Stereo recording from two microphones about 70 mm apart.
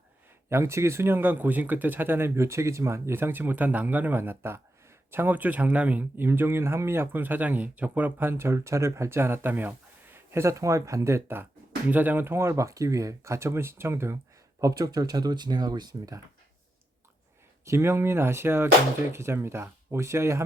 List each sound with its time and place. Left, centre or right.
0.5 s speech: right
8.3 s speech: right
11.9 s speech: right
14.6 s speech: right
17.7 s speech: right